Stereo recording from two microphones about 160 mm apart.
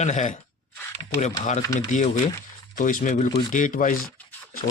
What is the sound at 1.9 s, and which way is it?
Speech, 50° left (ahead or behind).